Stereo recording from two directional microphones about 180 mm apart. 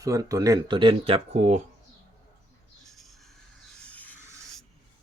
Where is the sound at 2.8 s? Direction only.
Centre (ahead or behind).